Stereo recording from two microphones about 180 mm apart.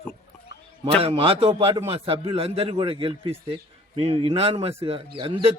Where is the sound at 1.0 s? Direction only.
30° right (ahead or behind).